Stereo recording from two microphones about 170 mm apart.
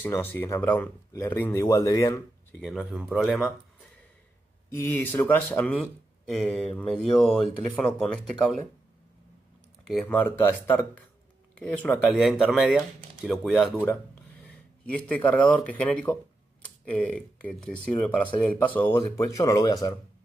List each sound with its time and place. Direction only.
0.0 s speech: 10° left (ahead or behind)
2.6 s speech: centre (ahead or behind)
4.7 s speech: 10° left (ahead or behind)
10.0 s speech: 10° left (ahead or behind)
12.2 s speech: centre (ahead or behind)
14.9 s speech: 10° left (ahead or behind)